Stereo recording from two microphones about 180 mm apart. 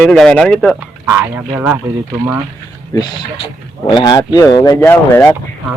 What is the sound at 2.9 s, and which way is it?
Speech, 20° left (ahead or behind).